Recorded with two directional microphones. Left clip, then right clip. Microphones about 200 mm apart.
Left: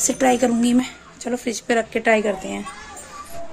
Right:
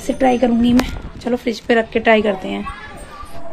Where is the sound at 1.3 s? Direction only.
10° left (ahead or behind).